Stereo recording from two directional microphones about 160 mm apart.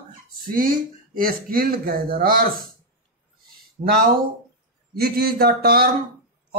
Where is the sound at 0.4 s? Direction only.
60° right (ahead or behind).